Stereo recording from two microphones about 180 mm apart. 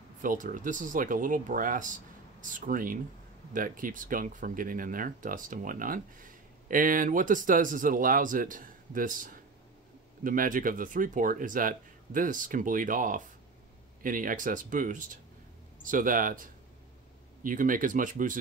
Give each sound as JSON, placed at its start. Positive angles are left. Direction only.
{"t": 0.2, "sound": "speech", "side_deg": -50}